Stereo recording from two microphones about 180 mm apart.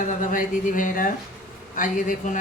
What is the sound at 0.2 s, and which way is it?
Speech, 45° left (ahead or behind).